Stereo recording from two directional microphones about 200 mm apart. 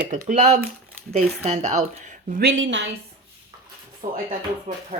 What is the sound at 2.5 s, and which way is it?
Speech, 70° right (ahead or behind).